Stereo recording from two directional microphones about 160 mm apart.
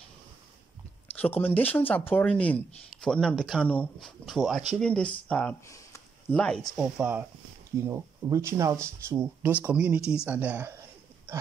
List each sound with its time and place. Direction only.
1.1 s speech: 10° left (ahead or behind)
4.3 s speech: centre (ahead or behind)
6.7 s speech: 5° right (ahead or behind)